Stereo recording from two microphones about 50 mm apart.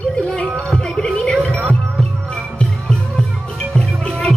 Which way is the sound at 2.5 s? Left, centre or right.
Centre.